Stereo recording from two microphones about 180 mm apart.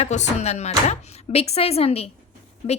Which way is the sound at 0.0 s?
40° left (ahead or behind).